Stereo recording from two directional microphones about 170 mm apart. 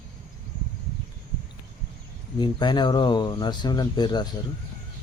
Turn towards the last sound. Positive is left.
turn(degrees=25)  # may be behind; listen again after turning